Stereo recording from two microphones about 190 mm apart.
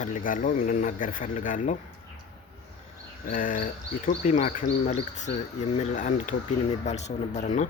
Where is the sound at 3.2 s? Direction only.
45° left (ahead or behind).